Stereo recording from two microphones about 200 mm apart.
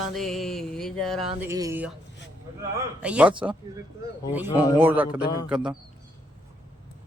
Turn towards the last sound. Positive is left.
turn(degrees=-5)  # may be behind; listen again after turning